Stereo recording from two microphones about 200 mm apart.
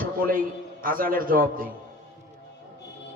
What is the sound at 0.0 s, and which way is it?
A man's voice, 45° right (ahead or behind).